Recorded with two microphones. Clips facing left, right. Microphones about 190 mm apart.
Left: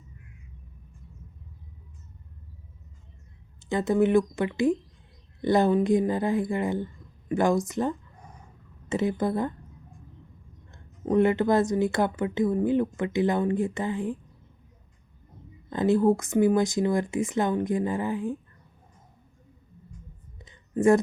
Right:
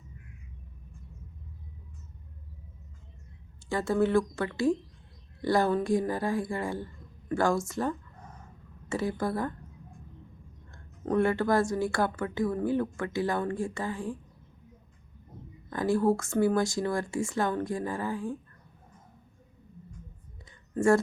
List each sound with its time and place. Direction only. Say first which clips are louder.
3.7 s speech: left 4 dB; 20° left (ahead or behind)
7.3 s a sound: left 3 dB; 20° left (ahead or behind)
8.9 s speech: left 4 dB; 20° left (ahead or behind)
10.7 s speech: left 4 dB; 20° left (ahead or behind)
15.7 s speech: left 4 dB; 20° left (ahead or behind)
20.4 s a sound: left 4 dB; 20° left (ahead or behind)